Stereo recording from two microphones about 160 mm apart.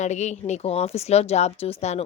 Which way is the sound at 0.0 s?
45° left (ahead or behind).